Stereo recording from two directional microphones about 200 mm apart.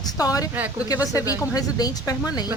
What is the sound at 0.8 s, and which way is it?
A woman's voice, 15° left (ahead or behind).